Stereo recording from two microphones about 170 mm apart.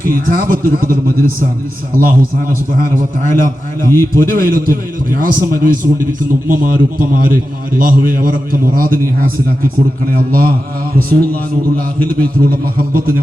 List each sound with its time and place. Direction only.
0.0 s a man's voice: 55° right (ahead or behind)